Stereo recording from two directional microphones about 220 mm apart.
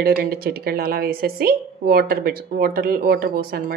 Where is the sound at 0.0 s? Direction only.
45° right (ahead or behind).